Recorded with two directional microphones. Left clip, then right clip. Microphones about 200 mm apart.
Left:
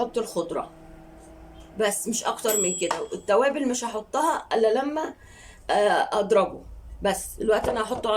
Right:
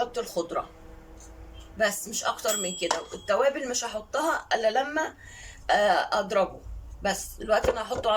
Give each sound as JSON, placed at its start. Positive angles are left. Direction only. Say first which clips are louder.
{"t": 0.1, "sound": "speech", "louder": "left 2 dB", "side_deg": 15}
{"t": 2.0, "sound": "speech", "louder": "left 2 dB", "side_deg": 15}